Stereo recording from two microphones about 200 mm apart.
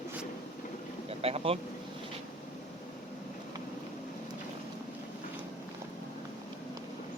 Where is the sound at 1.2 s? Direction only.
30° right (ahead or behind).